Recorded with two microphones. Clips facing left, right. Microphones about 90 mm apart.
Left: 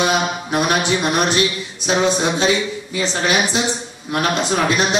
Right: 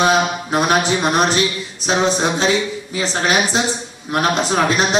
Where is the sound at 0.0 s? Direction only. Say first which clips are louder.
Right 3 dB; 40° right (ahead or behind).